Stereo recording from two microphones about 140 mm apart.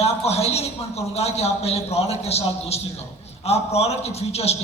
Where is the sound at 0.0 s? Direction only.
45° left (ahead or behind).